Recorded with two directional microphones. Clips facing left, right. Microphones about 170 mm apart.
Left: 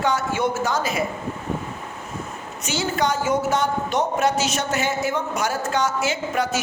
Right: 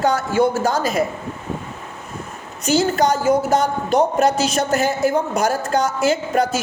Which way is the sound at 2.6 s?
40° right (ahead or behind).